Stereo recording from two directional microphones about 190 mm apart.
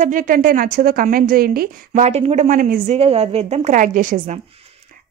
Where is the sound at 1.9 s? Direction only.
35° right (ahead or behind).